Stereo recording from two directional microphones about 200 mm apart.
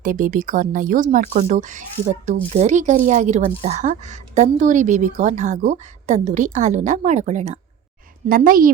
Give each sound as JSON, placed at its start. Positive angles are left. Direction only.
{"t": 0.0, "sound": "a woman's voice", "side_deg": -40}